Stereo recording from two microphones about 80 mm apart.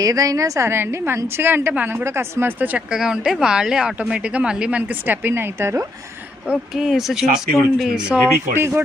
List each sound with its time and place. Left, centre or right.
0.0 s a woman's voice: right
2.6 s speech: centre
4.8 s speech: right
6.5 s speech: centre
8.5 s a woman's voice: right